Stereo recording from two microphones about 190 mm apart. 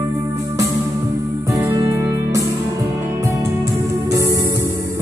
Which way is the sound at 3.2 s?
15° right (ahead or behind).